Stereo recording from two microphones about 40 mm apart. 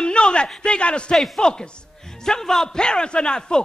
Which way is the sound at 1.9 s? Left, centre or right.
Centre.